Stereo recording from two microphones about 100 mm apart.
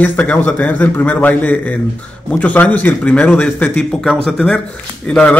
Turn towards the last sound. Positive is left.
turn(degrees=10)  # may be behind; listen again after turning